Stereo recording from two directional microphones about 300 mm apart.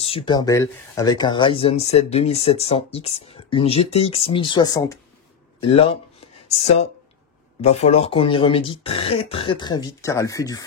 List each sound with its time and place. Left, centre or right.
0.0 s speech: centre